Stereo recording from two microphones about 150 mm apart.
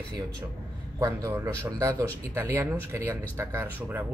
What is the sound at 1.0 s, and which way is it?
A man's voice, 25° right (ahead or behind).